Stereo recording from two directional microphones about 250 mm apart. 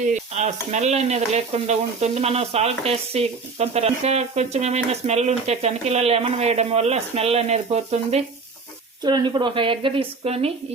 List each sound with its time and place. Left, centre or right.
0.0 s speech: right